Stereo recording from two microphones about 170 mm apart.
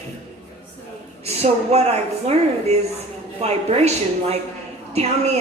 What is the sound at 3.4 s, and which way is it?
A woman's voice, 40° right (ahead or behind).